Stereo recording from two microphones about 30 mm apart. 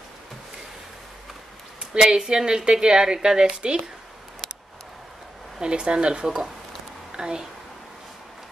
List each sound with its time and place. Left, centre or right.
1.8 s a woman's voice: right
5.6 s speech: right